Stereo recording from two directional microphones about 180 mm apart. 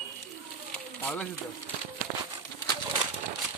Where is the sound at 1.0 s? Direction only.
10° left (ahead or behind).